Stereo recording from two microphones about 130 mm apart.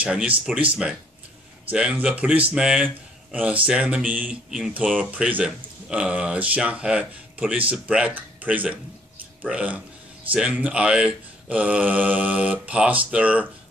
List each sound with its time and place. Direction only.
0.0 s speech: 5° right (ahead or behind)